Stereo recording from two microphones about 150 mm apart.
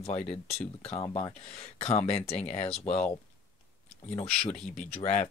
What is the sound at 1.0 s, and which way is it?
Speech, 25° left (ahead or behind).